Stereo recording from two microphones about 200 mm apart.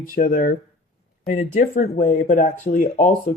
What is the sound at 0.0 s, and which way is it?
Speech, 45° left (ahead or behind).